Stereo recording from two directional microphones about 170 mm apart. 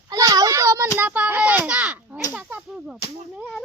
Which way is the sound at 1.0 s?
10° right (ahead or behind).